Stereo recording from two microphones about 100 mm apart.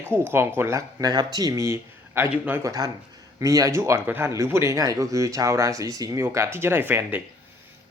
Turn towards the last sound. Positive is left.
turn(degrees=-20)  # may be behind; listen again after turning